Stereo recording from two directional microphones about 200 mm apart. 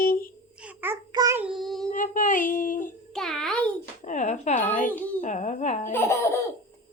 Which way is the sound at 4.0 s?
35° left (ahead or behind).